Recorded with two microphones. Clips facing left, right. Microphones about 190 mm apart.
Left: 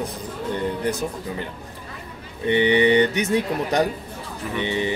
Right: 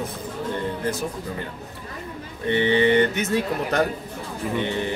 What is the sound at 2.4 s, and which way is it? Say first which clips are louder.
Speech: left 2 dB; 15° left (ahead or behind).